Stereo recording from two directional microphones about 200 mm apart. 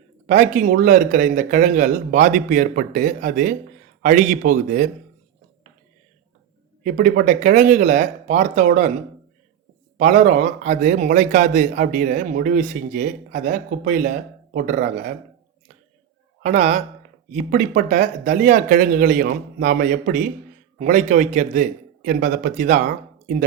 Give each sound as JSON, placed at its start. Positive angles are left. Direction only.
{"t": 0.3, "sound": "a man's voice", "side_deg": -40}
{"t": 6.8, "sound": "a man's voice", "side_deg": -45}
{"t": 10.0, "sound": "a man's voice", "side_deg": -40}
{"t": 16.4, "sound": "a man's voice", "side_deg": -35}